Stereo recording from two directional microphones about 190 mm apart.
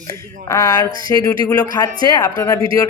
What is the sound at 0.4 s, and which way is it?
Speech, 15° left (ahead or behind).